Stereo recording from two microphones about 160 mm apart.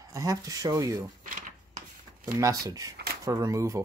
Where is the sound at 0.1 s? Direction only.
20° right (ahead or behind).